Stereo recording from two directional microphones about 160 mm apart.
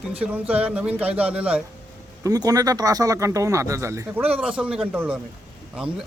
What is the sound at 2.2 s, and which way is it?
A man's voice, 20° right (ahead or behind).